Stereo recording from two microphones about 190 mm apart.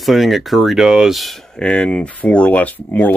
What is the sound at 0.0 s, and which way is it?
Speech, centre (ahead or behind).